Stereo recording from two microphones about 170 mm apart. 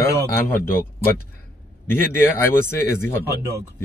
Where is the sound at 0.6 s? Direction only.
60° left (ahead or behind).